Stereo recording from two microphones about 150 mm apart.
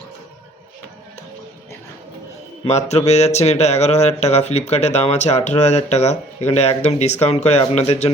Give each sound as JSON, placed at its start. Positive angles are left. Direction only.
{"t": 2.6, "sound": "speech", "side_deg": 45}